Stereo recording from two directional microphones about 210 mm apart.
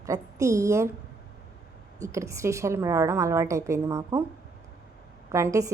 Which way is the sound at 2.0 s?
15° right (ahead or behind).